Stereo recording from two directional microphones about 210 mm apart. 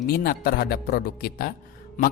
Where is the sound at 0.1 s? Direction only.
45° left (ahead or behind).